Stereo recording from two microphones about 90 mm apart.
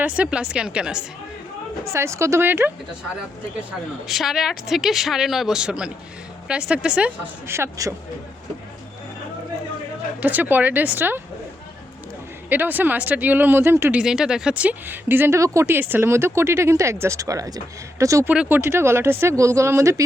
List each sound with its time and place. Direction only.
0.0 s speech: 15° right (ahead or behind)
1.8 s speech: 30° right (ahead or behind)
4.1 s a woman's voice: centre (ahead or behind)
7.4 s speech: 30° right (ahead or behind)
10.2 s speech: 20° right (ahead or behind)
12.5 s speech: 20° right (ahead or behind)
13.9 s speech: 5° right (ahead or behind); by 15.4 s 25° right (ahead or behind)
15.4 s speech: 35° right (ahead or behind)
15.6 s speech: 25° right (ahead or behind)
18.3 s speech: 20° right (ahead or behind); by 20.1 s 35° right (ahead or behind)